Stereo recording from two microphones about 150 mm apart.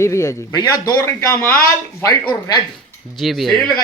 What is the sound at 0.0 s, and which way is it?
A man's voice, 20° left (ahead or behind).